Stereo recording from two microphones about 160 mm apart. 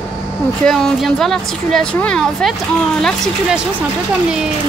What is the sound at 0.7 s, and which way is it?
A woman's voice, 5° left (ahead or behind).